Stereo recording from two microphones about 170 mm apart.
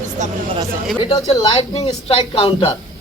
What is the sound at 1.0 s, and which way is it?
Speech, 30° left (ahead or behind).